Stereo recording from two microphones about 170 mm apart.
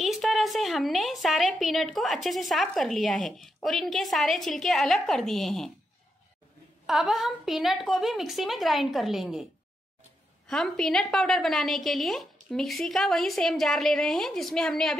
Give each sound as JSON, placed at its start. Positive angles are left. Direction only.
{"t": 0.0, "sound": "a woman's voice", "side_deg": 0}
{"t": 6.9, "sound": "a woman's voice", "side_deg": 0}
{"t": 10.5, "sound": "a woman's voice", "side_deg": 5}